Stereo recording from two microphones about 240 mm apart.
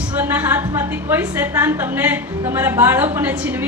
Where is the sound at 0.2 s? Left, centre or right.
Centre.